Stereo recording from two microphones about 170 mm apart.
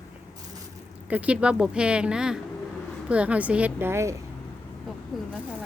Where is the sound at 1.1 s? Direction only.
10° right (ahead or behind).